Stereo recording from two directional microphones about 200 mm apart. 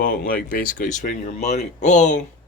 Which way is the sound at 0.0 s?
45° left (ahead or behind).